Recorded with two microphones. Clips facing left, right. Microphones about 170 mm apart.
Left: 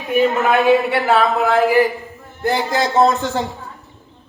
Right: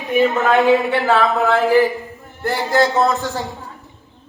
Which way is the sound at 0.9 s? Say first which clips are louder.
Even; 15° left (ahead or behind).